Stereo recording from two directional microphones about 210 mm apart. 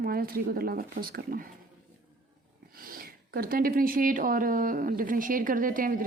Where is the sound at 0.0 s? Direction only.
45° right (ahead or behind).